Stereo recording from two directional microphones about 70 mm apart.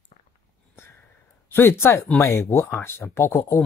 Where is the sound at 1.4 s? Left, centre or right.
Left.